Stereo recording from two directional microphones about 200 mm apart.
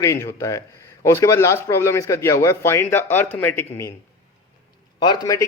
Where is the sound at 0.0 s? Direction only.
15° left (ahead or behind).